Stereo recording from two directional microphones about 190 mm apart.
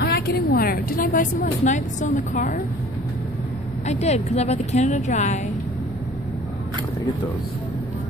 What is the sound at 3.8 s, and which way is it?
A woman's voice, 35° left (ahead or behind).